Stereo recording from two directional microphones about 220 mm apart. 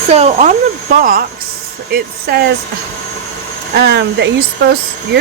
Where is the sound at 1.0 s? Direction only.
40° right (ahead or behind).